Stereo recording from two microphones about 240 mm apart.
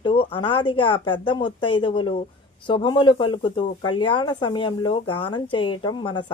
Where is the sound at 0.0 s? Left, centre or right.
Left.